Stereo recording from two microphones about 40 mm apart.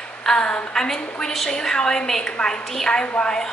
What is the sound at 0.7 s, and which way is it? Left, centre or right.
A woman's voice, centre.